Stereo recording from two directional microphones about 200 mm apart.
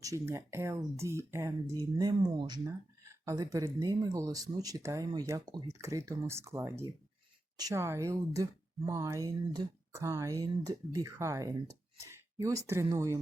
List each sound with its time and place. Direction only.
0.0 s speech: 15° right (ahead or behind)